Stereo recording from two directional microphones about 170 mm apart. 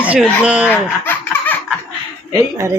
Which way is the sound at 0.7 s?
10° left (ahead or behind).